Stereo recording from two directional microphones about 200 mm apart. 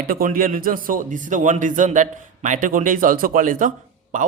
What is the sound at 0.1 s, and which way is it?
Speech, 45° right (ahead or behind).